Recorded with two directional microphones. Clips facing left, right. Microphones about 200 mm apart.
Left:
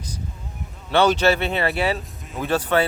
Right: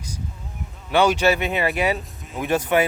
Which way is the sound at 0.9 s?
10° right (ahead or behind).